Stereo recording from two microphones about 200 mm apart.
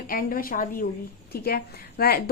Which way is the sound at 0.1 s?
45° left (ahead or behind).